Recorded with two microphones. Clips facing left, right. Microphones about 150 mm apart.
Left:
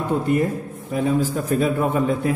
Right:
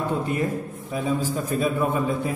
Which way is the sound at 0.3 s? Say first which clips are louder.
Left 5 dB; 60° left (ahead or behind).